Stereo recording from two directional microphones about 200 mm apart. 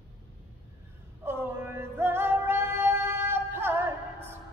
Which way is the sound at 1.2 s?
10° right (ahead or behind).